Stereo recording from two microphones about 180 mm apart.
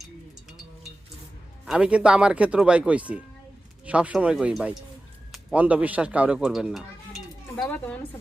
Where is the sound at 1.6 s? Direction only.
5° right (ahead or behind).